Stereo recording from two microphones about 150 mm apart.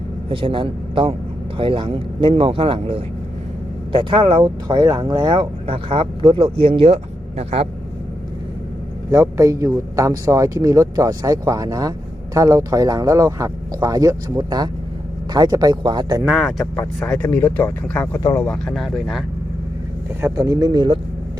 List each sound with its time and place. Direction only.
0.3 s speech: 35° right (ahead or behind)
9.1 s speech: 20° right (ahead or behind)
16.2 s speech: 5° right (ahead or behind)
17.2 s speech: 15° left (ahead or behind)
20.2 s speech: 25° right (ahead or behind)